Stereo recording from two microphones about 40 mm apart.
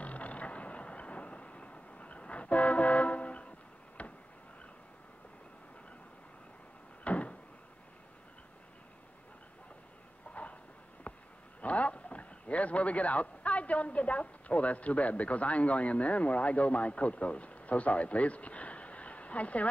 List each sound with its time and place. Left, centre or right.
0.0 s vehicle: left
4.0 s a sound: left
7.1 s door: left
10.3 s train: left
11.1 s a sound: left
11.6 s speech: left